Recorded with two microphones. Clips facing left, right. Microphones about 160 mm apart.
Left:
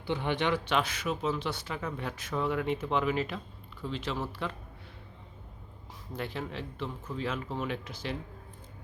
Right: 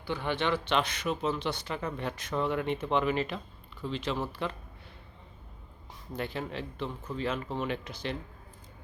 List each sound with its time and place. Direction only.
0.0 s speech: 20° left (ahead or behind); by 4.5 s centre (ahead or behind)
6.1 s speech: centre (ahead or behind)